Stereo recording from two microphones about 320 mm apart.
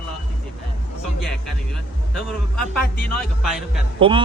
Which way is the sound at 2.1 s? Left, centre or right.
Centre.